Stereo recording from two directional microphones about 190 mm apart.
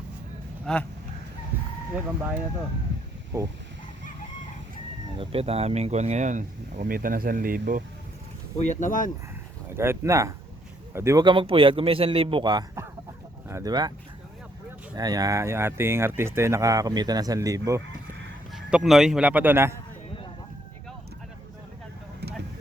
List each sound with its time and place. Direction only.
0.6 s speech: 5° left (ahead or behind)
5.1 s speech: 30° right (ahead or behind); by 7.8 s 50° right (ahead or behind)
8.5 s speech: 40° left (ahead or behind)
9.7 s a man's voice: 15° right (ahead or behind)
14.9 s speech: 20° right (ahead or behind)
18.5 s a man's voice: centre (ahead or behind)